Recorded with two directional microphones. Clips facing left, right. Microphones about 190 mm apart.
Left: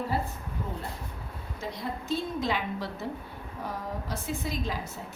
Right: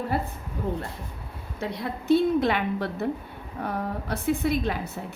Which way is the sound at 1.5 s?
65° right (ahead or behind).